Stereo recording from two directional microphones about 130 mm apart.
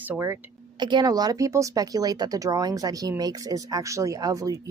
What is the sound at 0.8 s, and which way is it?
Speech, 35° right (ahead or behind).